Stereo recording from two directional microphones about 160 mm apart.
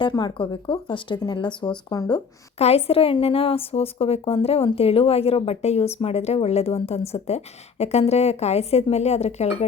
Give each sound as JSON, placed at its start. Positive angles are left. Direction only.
{"t": 0.0, "sound": "speech", "side_deg": 25}
{"t": 2.6, "sound": "speech", "side_deg": 40}